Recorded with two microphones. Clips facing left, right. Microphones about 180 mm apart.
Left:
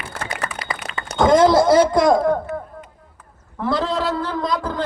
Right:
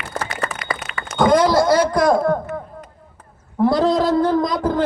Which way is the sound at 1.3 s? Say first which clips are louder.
Left 3 dB; 25° left (ahead or behind).